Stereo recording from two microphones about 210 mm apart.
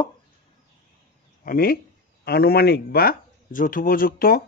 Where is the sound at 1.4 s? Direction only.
45° left (ahead or behind).